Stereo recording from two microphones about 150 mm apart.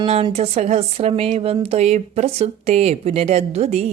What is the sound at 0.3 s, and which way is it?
Speech, 45° right (ahead or behind).